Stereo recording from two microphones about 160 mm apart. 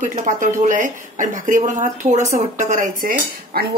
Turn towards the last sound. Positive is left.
turn(degrees=-60)  # may be behind; listen again after turning